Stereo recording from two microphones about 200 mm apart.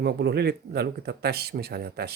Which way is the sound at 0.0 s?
55° right (ahead or behind).